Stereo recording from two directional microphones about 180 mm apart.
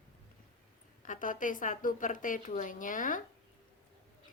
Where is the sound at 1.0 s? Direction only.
45° left (ahead or behind).